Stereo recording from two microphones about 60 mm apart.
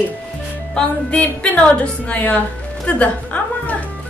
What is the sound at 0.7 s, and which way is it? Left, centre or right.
A woman's voice, centre.